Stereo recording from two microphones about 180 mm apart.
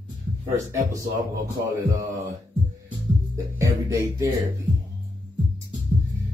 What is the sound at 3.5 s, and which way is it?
Music, 15° right (ahead or behind).